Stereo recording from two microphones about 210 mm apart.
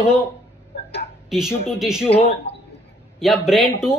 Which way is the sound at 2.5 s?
55° left (ahead or behind).